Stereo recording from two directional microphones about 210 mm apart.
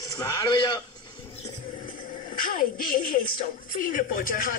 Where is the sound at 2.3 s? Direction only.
40° left (ahead or behind).